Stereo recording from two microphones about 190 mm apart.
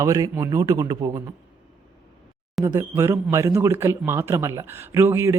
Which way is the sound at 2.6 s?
15° right (ahead or behind).